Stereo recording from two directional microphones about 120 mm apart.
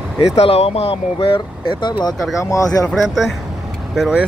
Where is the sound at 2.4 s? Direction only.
25° left (ahead or behind).